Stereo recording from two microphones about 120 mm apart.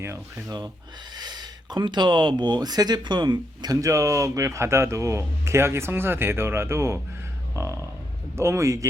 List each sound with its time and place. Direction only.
0.0 s speech: 20° right (ahead or behind)
1.1 s speech: 35° right (ahead or behind)